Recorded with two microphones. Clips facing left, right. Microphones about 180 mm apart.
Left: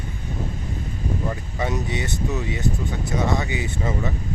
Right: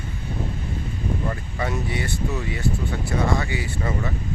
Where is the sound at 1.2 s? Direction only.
20° left (ahead or behind).